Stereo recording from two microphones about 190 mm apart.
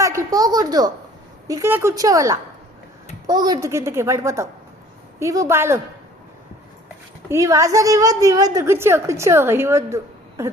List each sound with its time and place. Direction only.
0.0 s a woman's voice: 15° right (ahead or behind)
6.8 s speech: 15° right (ahead or behind)